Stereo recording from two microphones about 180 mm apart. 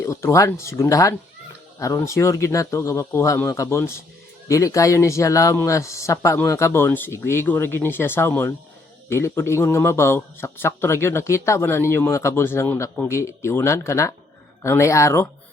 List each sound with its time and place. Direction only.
0.0 s a man's voice: 15° left (ahead or behind)